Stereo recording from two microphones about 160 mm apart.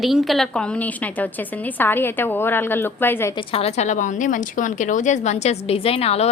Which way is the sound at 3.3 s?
40° left (ahead or behind).